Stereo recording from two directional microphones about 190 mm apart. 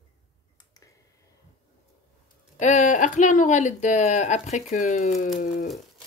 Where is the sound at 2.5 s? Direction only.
40° left (ahead or behind).